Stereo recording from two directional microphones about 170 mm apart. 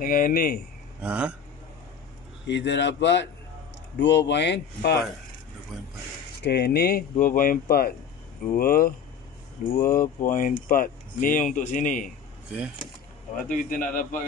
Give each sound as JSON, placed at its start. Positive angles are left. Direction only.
{"t": 0.0, "sound": "speech", "side_deg": 55}
{"t": 1.0, "sound": "a man's voice", "side_deg": -5}
{"t": 2.4, "sound": "speech", "side_deg": 90}
{"t": 6.4, "sound": "speech", "side_deg": 70}
{"t": 13.4, "sound": "speech", "side_deg": 55}